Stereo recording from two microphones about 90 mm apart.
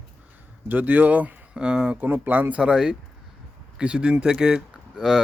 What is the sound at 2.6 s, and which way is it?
Speech, 10° right (ahead or behind).